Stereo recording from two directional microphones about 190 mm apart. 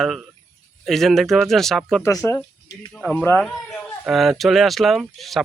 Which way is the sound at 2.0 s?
15° left (ahead or behind).